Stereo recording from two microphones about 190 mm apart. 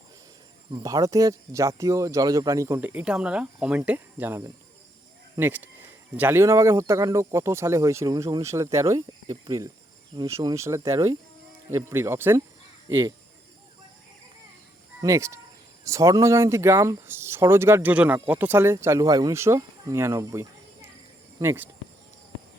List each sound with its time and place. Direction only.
0.7 s speech: 20° right (ahead or behind)
12.9 s speech: 25° right (ahead or behind)
15.0 s speech: 15° right (ahead or behind)